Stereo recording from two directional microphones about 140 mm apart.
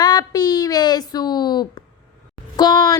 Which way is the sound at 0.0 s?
30° left (ahead or behind).